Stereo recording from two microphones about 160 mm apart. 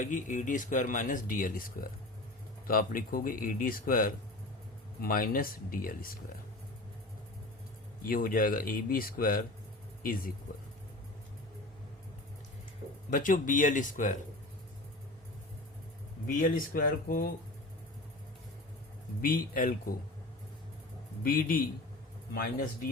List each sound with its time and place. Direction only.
0.0 s speech: 55° left (ahead or behind)
8.0 s speech: 65° left (ahead or behind)
13.1 s speech: 55° left (ahead or behind)
16.2 s speech: 65° left (ahead or behind)
19.2 s speech: 60° left (ahead or behind)
21.2 s speech: 65° left (ahead or behind)